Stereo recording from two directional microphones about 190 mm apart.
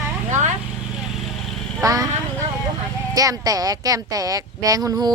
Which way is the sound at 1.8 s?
20° right (ahead or behind).